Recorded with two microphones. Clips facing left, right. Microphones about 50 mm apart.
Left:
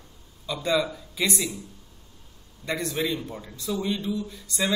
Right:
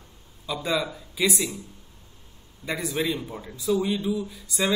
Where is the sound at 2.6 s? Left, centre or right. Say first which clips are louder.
Even; centre.